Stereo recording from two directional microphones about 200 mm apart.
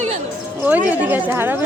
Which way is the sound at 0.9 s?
10° right (ahead or behind).